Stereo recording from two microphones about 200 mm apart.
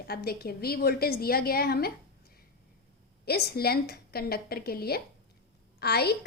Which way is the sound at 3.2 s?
50° left (ahead or behind).